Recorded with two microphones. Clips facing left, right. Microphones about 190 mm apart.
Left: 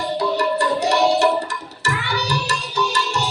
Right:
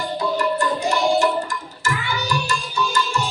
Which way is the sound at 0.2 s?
70° left (ahead or behind).